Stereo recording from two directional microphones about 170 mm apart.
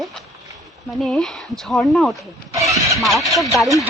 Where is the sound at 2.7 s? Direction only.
20° right (ahead or behind).